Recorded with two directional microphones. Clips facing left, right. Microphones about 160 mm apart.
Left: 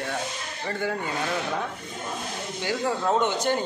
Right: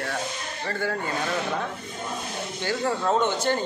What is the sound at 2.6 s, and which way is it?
Speech, 10° left (ahead or behind).